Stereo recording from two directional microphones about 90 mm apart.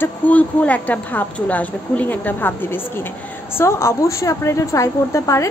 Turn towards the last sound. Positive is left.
turn(degrees=35)  # may be behind; listen again after turning